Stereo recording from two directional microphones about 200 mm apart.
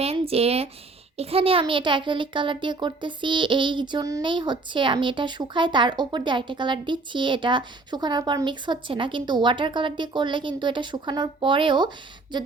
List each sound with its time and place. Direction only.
0.0 s a child's voice: 30° right (ahead or behind)